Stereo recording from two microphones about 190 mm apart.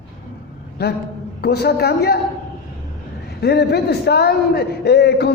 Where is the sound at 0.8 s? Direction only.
60° left (ahead or behind).